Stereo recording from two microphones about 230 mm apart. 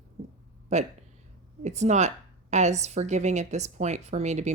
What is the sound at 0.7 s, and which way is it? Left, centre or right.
A woman's voice, right.